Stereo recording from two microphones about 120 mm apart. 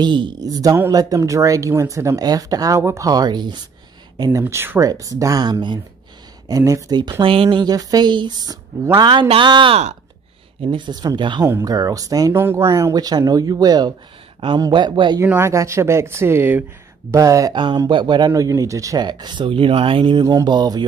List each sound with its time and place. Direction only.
0.0 s speech: 40° right (ahead or behind)
4.2 s speech: 25° right (ahead or behind); by 7.6 s 45° right (ahead or behind)
7.6 s speech: 35° right (ahead or behind)
11.4 s speech: 30° right (ahead or behind)
12.4 s speech: 20° right (ahead or behind); by 15.1 s 40° right (ahead or behind)
15.2 s speech: 20° right (ahead or behind)
17.7 s speech: 40° right (ahead or behind)
18.3 s speech: 25° right (ahead or behind); by 20.2 s 45° right (ahead or behind)
20.2 s speech: 35° right (ahead or behind)